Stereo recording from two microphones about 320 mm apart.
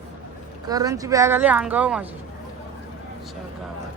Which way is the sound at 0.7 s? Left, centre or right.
Centre.